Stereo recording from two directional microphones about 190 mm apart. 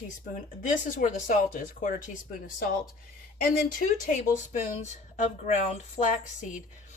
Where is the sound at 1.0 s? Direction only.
45° left (ahead or behind).